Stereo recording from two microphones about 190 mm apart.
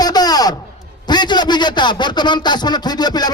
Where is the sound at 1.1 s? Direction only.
25° left (ahead or behind).